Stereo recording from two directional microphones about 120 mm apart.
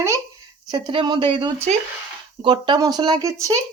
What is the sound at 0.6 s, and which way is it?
Speech, 40° right (ahead or behind).